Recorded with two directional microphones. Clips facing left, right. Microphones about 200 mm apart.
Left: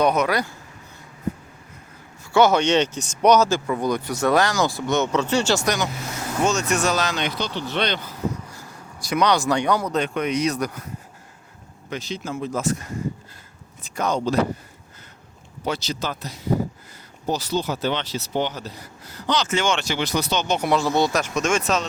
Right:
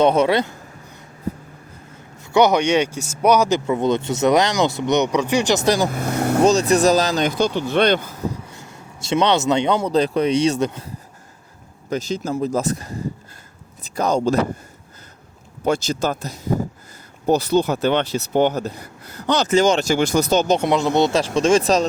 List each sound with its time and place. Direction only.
0.0 s speech: 25° right (ahead or behind)
2.3 s speech: 15° right (ahead or behind)
5.6 s speech: 30° right (ahead or behind)
5.9 s vehicle: 55° right (ahead or behind)
6.4 s speech: 35° right (ahead or behind); by 8.1 s 50° right (ahead or behind)
8.4 s speech: 25° right (ahead or behind)
11.9 s speech: 45° right (ahead or behind)
15.6 s speech: 50° right (ahead or behind)
17.2 s speech: 55° right (ahead or behind)
19.5 s speech: 40° right (ahead or behind)
20.6 s speech: 20° right (ahead or behind)